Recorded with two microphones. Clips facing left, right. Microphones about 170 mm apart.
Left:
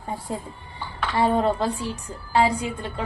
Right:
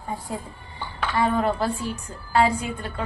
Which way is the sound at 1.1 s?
25° left (ahead or behind).